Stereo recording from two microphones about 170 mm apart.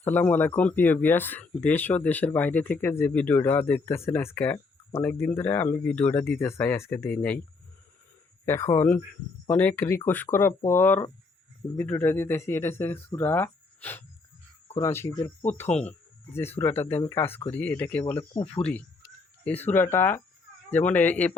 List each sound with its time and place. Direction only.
0.0 s speech: 10° left (ahead or behind)
8.4 s speech: 15° left (ahead or behind)
18.3 s speech: 35° left (ahead or behind)
19.5 s speech: 10° left (ahead or behind)